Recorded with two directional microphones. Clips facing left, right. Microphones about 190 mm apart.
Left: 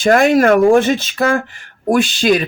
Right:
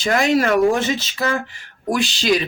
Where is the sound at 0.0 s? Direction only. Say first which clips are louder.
Left 6 dB; 55° left (ahead or behind).